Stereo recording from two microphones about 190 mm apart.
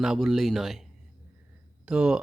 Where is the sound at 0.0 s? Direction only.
Centre (ahead or behind).